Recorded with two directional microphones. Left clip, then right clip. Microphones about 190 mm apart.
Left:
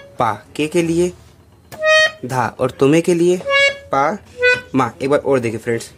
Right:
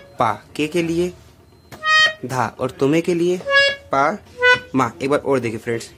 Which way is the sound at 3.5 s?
5° left (ahead or behind).